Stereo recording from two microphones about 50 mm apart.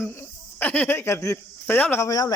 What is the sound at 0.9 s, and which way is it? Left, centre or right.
Speech, left.